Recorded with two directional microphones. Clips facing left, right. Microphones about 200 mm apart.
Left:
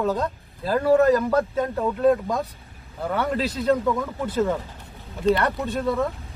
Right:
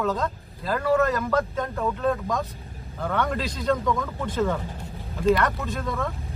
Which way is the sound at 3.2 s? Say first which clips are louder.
Left 2 dB; 30° left (ahead or behind).